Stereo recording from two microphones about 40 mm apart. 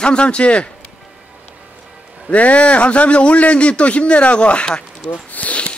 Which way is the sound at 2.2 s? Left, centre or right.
Left.